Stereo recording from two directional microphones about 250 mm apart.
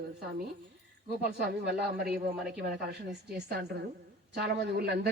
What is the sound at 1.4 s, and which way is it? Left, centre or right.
A woman's voice, right.